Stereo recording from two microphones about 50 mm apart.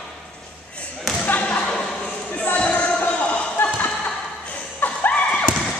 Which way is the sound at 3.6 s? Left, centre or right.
Left.